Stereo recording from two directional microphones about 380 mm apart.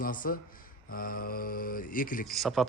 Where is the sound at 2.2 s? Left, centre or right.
Centre.